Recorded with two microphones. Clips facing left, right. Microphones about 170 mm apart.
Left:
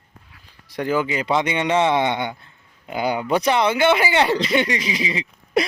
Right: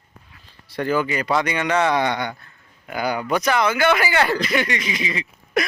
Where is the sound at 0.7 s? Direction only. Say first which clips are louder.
Even; 15° left (ahead or behind).